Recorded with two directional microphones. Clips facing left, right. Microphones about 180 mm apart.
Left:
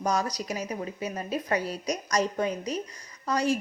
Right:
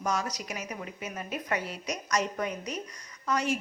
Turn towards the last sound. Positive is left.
turn(degrees=35)  # may be behind; listen again after turning